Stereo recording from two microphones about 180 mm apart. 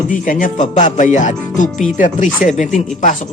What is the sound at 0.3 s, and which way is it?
Speech, 45° left (ahead or behind).